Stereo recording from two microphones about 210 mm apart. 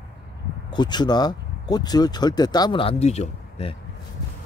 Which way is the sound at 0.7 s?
20° left (ahead or behind).